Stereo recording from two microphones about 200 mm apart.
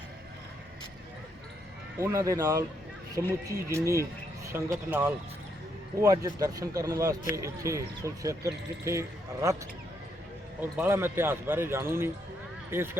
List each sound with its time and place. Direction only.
2.0 s a man's voice: 15° right (ahead or behind)
10.6 s a man's voice: 10° right (ahead or behind)